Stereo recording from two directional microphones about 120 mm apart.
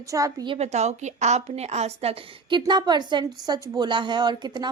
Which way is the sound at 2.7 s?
35° right (ahead or behind).